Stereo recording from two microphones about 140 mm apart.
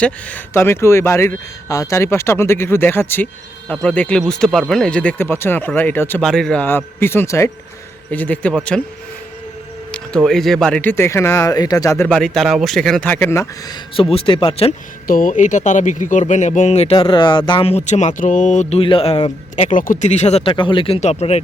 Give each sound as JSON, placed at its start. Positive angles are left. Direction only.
{"t": 0.0, "sound": "speech", "side_deg": 10}
{"t": 6.2, "sound": "speech", "side_deg": 5}
{"t": 10.2, "sound": "speech", "side_deg": 5}
{"t": 12.1, "sound": "speech", "side_deg": 0}
{"t": 13.1, "sound": "speech", "side_deg": 20}
{"t": 13.9, "sound": "speech", "side_deg": 40}
{"t": 15.0, "sound": "speech", "side_deg": 85}
{"t": 18.8, "sound": "speech", "side_deg": 40}
{"t": 19.5, "sound": "speech", "side_deg": 55}